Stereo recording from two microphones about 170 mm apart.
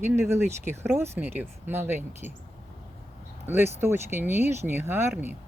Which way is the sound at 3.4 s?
15° right (ahead or behind).